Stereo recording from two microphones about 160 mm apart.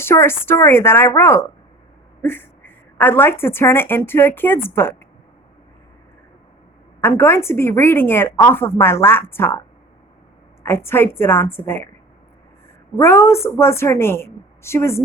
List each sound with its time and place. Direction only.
0.0 s a woman's voice: 15° left (ahead or behind)
7.0 s a woman's voice: 15° left (ahead or behind)
12.9 s a woman's voice: 15° left (ahead or behind)